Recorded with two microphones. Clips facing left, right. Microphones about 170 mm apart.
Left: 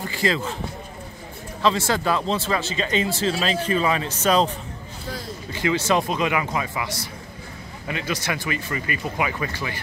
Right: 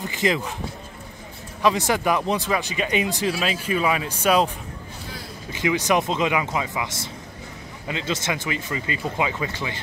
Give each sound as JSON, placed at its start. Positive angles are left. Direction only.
{"t": 0.0, "sound": "speech", "side_deg": -20}
{"t": 1.6, "sound": "speech", "side_deg": -15}
{"t": 5.5, "sound": "speech", "side_deg": -15}